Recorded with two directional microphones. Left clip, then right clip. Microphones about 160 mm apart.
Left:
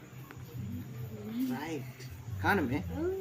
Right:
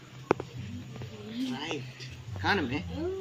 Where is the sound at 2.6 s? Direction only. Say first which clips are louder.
Right 1 dB; 15° left (ahead or behind).